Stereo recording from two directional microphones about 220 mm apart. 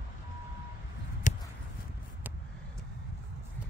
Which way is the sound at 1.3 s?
35° left (ahead or behind).